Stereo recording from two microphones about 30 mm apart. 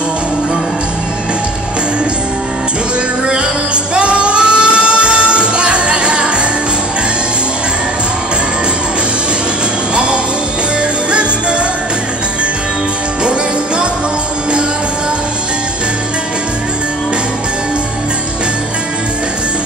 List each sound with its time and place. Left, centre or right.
3.9 s music: right
9.9 s music: right
13.2 s music: right